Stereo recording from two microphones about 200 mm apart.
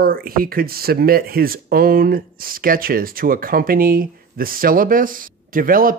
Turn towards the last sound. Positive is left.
turn(degrees=-45)  # may be behind; listen again after turning